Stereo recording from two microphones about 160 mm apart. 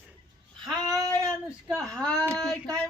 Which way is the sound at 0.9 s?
20° right (ahead or behind).